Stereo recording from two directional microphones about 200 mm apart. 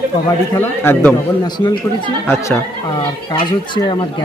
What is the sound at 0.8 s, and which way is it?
Speech, 10° left (ahead or behind).